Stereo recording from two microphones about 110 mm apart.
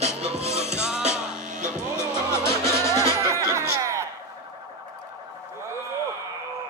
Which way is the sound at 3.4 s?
25° right (ahead or behind).